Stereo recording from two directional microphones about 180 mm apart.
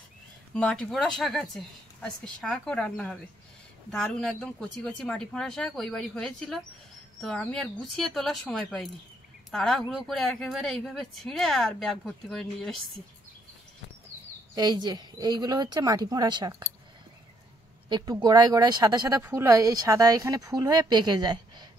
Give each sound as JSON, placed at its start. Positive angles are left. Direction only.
{"t": 0.6, "sound": "speech", "side_deg": 5}
{"t": 14.5, "sound": "speech", "side_deg": -25}
{"t": 17.8, "sound": "speech", "side_deg": -25}